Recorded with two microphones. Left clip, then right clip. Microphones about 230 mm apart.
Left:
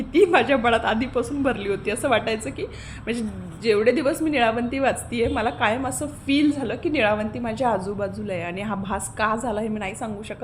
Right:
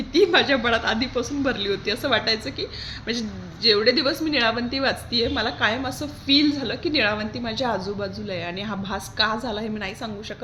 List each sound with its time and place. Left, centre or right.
0.1 s a woman's voice: centre